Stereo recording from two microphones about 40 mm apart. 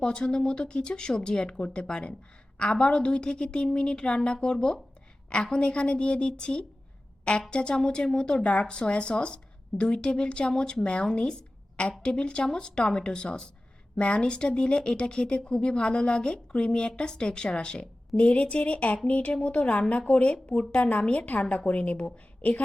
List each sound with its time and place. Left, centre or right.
0.0 s speech: left
18.2 s a woman's voice: left